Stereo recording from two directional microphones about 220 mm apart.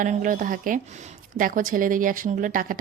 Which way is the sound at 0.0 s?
35° right (ahead or behind).